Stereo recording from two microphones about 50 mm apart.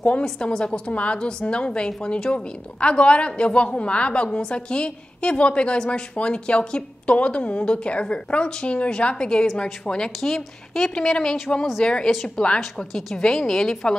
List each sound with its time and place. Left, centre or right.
0.2 s a woman's voice: centre